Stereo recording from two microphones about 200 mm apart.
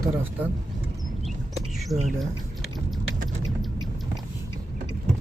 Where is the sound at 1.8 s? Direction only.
Centre (ahead or behind).